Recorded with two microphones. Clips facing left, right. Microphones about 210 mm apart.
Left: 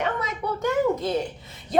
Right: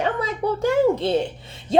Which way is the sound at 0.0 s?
30° right (ahead or behind).